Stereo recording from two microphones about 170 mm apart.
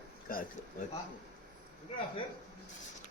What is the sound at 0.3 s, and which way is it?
Speech, 55° left (ahead or behind).